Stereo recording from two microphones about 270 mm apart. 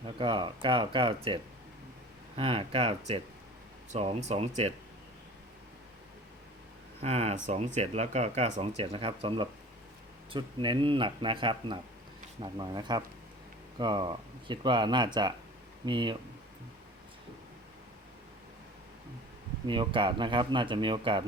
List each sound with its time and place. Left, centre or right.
0.0 s speech: centre
7.0 s speech: right
19.6 s speech: centre